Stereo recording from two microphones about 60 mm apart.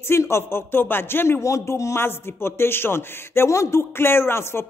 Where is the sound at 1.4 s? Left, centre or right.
Left.